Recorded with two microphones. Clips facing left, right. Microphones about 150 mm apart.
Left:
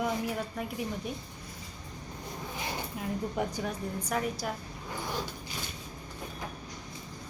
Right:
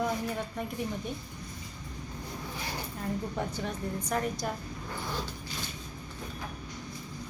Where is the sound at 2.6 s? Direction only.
20° left (ahead or behind).